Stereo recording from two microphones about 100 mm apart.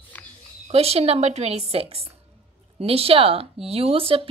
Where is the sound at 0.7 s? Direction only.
90° right.